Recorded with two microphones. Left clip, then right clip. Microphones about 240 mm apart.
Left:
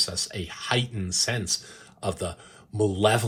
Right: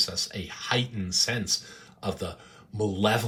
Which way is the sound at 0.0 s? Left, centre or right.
Left.